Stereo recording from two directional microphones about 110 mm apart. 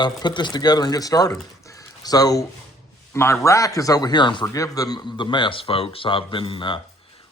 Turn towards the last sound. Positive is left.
turn(degrees=50)  # may be behind; listen again after turning